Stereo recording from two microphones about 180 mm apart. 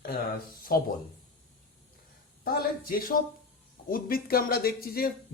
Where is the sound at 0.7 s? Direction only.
55° left (ahead or behind).